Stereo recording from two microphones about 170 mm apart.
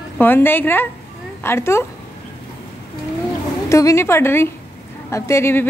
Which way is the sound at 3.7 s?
20° left (ahead or behind).